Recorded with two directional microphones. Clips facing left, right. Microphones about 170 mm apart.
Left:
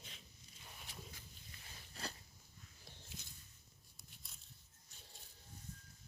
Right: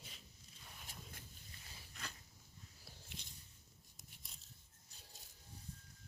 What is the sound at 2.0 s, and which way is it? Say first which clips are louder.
Biting: left 5 dB; 35° left (ahead or behind).